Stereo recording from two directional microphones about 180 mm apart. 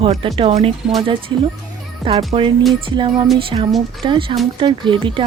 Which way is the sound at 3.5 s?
30° right (ahead or behind).